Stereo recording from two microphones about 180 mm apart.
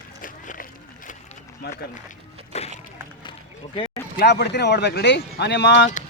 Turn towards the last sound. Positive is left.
turn(degrees=75)  # may be behind; listen again after turning